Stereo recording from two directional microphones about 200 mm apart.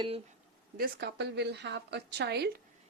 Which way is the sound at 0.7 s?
50° right (ahead or behind).